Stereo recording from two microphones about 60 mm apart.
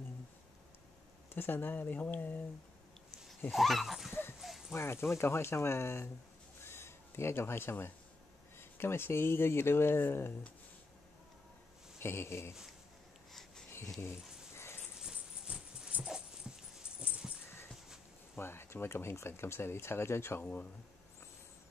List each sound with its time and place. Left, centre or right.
1.3 s speech: left
3.5 s speech: centre
4.1 s dog: left
4.4 s dog: centre
4.7 s speech: left
6.6 s a sound: left
8.5 s speech: left
12.0 s speech: left
13.3 s a sound: centre
14.5 s dog: left
15.0 s dog: centre
18.3 s speech: left